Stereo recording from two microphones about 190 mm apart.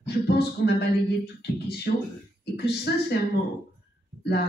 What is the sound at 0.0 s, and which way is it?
Speech, 60° left (ahead or behind).